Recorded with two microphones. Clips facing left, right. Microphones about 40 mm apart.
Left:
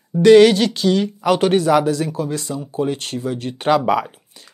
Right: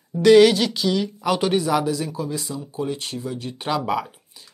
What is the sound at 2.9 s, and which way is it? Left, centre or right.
Speech, left.